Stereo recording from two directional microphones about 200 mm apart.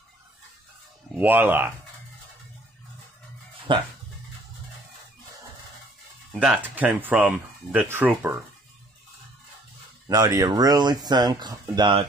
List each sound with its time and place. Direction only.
1.1 s speech: 10° right (ahead or behind)
3.7 s speech: 25° right (ahead or behind)
6.4 s speech: 5° right (ahead or behind)
10.0 s speech: 15° right (ahead or behind)